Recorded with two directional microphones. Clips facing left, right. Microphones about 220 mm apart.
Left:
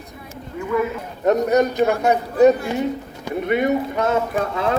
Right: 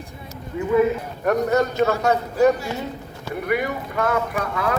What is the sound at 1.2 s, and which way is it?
Speech, 20° left (ahead or behind).